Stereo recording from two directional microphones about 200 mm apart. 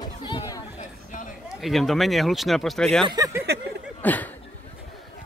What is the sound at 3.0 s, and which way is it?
Speech, 20° right (ahead or behind).